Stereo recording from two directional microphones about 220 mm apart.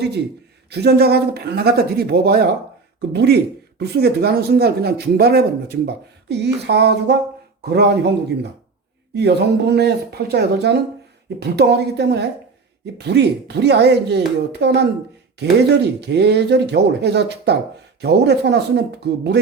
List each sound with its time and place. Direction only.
0.7 s speech: 50° right (ahead or behind)
9.1 s speech: 50° right (ahead or behind)